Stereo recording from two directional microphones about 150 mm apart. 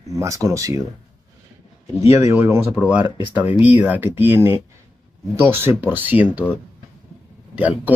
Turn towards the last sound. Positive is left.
turn(degrees=-10)  # may be behind; listen again after turning